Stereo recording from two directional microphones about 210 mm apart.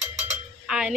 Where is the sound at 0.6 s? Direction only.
5° right (ahead or behind).